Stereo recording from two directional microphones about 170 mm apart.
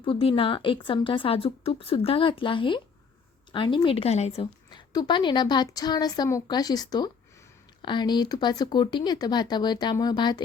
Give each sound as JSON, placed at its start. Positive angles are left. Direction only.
{"t": 0.0, "sound": "a woman's voice", "side_deg": 30}
{"t": 4.4, "sound": "a woman's voice", "side_deg": 25}